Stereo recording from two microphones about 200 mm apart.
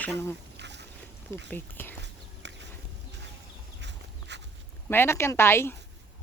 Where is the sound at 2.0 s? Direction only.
60° right (ahead or behind).